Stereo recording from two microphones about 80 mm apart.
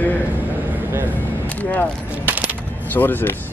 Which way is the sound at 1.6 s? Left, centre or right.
Left.